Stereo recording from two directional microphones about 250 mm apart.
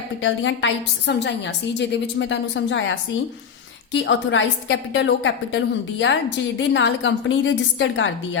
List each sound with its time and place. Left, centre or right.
0.2 s a woman's voice: left